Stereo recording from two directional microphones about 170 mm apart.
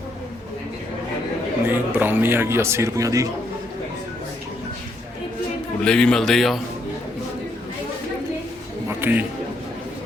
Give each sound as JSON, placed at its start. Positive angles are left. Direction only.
{"t": 1.6, "sound": "speech", "side_deg": -10}
{"t": 5.8, "sound": "speech", "side_deg": 5}
{"t": 8.9, "sound": "a sound", "side_deg": -10}